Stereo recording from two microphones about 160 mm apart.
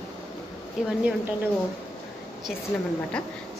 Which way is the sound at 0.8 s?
5° right (ahead or behind).